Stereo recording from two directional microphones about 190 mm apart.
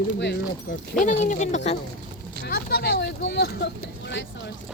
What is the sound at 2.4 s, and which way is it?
Speech, 55° left (ahead or behind).